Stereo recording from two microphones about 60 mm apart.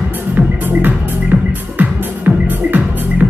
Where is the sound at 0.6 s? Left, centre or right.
Right.